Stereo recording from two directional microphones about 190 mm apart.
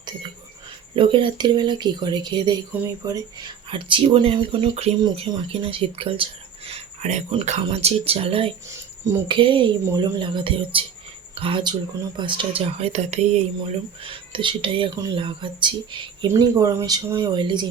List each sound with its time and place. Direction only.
0.9 s speech: 25° right (ahead or behind)